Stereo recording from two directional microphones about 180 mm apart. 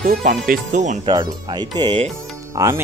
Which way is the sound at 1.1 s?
20° right (ahead or behind).